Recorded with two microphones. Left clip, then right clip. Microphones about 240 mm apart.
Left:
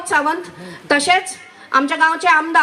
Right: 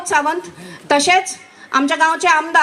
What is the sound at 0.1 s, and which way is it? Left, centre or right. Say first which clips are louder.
A woman's voice: even; right.